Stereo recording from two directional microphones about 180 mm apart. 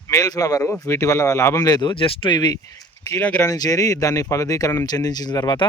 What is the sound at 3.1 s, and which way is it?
Speech, 10° left (ahead or behind).